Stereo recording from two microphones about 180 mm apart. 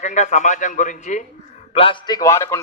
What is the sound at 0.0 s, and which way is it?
A man's voice, 40° left (ahead or behind).